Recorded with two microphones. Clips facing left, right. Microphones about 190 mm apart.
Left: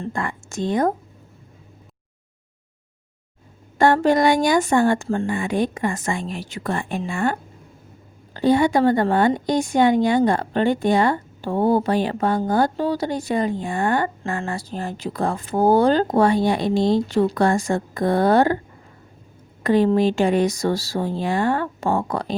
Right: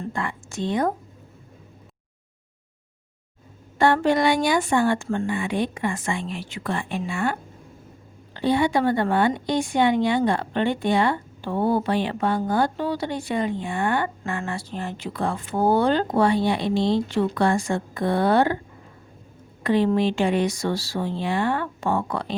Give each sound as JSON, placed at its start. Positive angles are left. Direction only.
{"t": 0.1, "sound": "speech", "side_deg": 45}
{"t": 3.8, "sound": "a woman's voice", "side_deg": 45}
{"t": 19.6, "sound": "a woman's voice", "side_deg": 45}